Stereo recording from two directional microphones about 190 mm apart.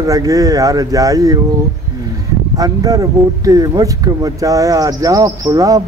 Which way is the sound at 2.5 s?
20° right (ahead or behind).